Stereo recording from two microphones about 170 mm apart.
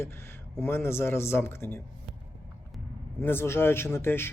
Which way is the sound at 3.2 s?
15° left (ahead or behind).